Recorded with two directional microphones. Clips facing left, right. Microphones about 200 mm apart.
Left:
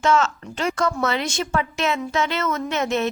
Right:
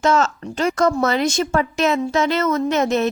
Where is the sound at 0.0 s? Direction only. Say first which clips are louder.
Right 2 dB; 40° right (ahead or behind).